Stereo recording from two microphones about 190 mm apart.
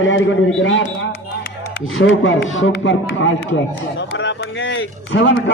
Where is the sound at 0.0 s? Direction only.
75° left (ahead or behind).